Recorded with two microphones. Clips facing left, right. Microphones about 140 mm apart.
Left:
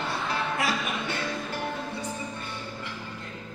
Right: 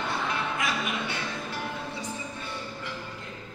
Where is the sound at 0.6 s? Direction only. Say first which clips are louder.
Left 1 dB; 40° left (ahead or behind).